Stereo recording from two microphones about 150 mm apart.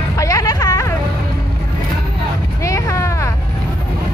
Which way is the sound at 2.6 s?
20° left (ahead or behind).